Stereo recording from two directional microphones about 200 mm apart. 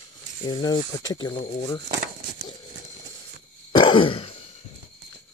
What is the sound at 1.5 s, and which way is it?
Speech, 35° left (ahead or behind).